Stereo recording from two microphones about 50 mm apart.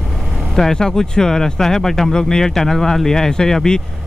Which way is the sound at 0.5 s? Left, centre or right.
Centre.